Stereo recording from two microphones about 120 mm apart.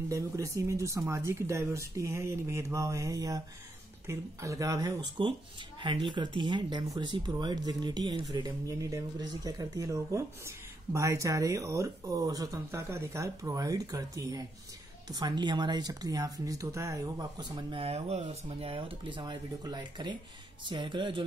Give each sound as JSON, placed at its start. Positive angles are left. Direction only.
{"t": 0.1, "sound": "speech", "side_deg": -25}
{"t": 5.8, "sound": "speech", "side_deg": -45}